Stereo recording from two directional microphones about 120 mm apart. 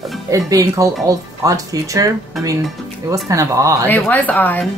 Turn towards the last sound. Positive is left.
turn(degrees=15)  # may be behind; listen again after turning